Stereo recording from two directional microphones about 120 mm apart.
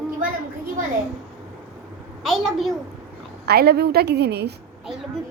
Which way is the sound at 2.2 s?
Centre (ahead or behind).